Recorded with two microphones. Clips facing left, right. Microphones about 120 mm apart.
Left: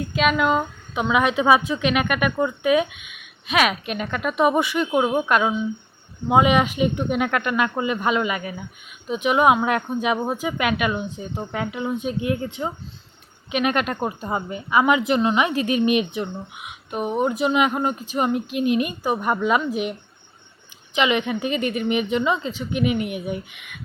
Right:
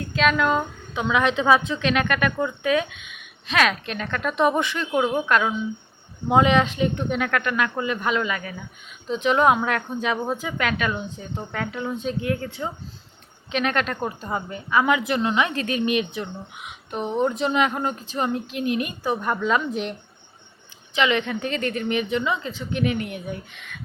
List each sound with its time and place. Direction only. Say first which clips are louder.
0.1 s a woman's voice: even; 10° left (ahead or behind)
16.6 s a woman's voice: left 1 dB; 5° left (ahead or behind)